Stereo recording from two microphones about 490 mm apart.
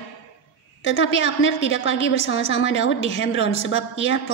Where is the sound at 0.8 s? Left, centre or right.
Left.